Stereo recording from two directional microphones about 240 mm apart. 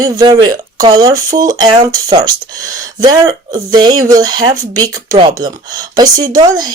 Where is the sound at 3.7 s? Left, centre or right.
Centre.